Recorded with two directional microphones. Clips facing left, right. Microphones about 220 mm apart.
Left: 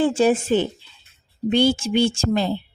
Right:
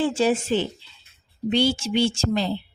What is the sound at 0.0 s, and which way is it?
Speech, 55° left (ahead or behind).